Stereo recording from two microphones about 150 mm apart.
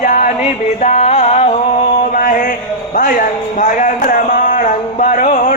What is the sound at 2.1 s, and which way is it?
Mantra, 65° left (ahead or behind).